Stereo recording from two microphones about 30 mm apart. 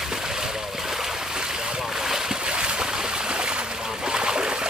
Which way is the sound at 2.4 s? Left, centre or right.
Right.